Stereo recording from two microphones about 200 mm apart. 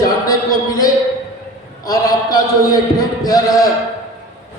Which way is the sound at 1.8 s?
20° left (ahead or behind).